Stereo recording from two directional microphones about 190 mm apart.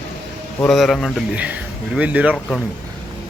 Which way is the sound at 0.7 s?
Centre (ahead or behind).